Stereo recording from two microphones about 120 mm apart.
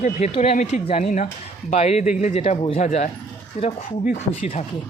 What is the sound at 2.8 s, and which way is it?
Speech, 75° left (ahead or behind).